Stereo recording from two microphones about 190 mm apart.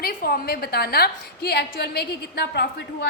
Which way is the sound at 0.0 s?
50° left (ahead or behind).